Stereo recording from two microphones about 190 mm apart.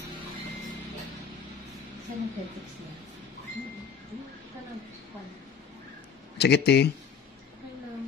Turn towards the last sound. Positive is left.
turn(degrees=60)  # may be behind; listen again after turning